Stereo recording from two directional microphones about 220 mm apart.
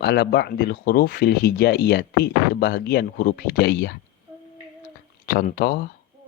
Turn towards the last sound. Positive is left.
turn(degrees=45)  # may be behind; listen again after turning